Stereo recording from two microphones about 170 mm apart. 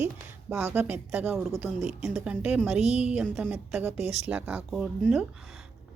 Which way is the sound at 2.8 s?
40° right (ahead or behind).